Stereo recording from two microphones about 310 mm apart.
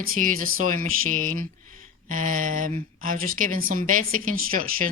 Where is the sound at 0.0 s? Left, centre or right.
Right.